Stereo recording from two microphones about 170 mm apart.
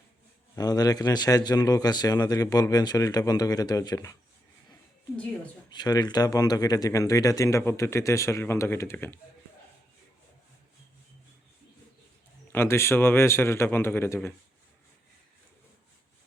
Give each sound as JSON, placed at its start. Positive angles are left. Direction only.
{"t": 0.5, "sound": "a man's voice", "side_deg": 20}
{"t": 5.7, "sound": "a man's voice", "side_deg": 25}
{"t": 12.5, "sound": "a man's voice", "side_deg": 15}